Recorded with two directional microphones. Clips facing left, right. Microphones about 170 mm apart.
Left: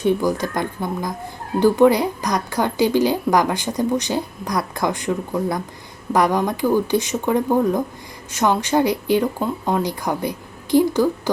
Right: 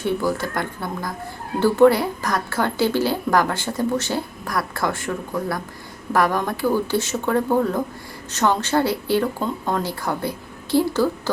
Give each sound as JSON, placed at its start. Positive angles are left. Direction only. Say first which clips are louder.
{"t": 0.0, "sound": "speech", "louder": "left 3 dB", "side_deg": 15}